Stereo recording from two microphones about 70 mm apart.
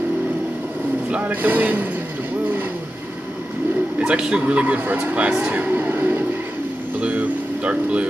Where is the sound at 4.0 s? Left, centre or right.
Centre.